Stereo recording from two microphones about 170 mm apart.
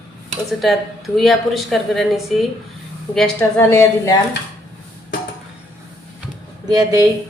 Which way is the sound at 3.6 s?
15° left (ahead or behind).